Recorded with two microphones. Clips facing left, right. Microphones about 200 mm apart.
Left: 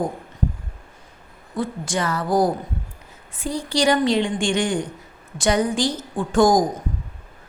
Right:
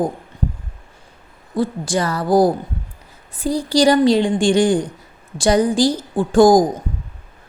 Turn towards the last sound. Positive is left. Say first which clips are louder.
# right 5 dB
turn(degrees=-35)  # may be behind; listen again after turning